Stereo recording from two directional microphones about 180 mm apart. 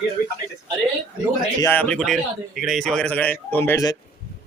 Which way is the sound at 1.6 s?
10° left (ahead or behind).